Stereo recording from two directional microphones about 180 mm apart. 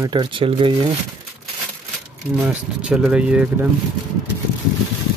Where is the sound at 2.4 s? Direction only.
5° right (ahead or behind).